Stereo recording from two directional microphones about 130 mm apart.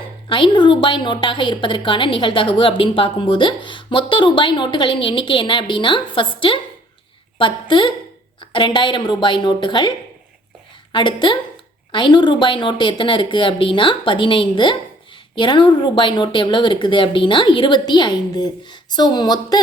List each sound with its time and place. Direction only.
0.3 s speech: 40° left (ahead or behind)
10.9 s speech: 40° left (ahead or behind)